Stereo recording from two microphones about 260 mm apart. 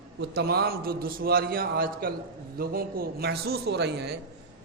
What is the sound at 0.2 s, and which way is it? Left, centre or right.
A man's voice, right.